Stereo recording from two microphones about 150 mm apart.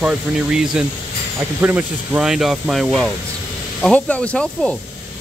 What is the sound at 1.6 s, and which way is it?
Speech, 10° right (ahead or behind).